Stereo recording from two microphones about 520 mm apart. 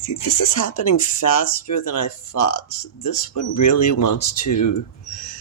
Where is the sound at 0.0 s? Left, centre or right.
Left.